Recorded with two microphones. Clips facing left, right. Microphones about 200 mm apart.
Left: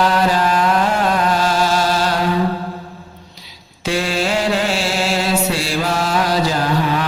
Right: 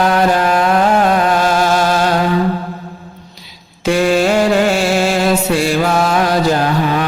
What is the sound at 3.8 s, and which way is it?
Mantra, 50° right (ahead or behind).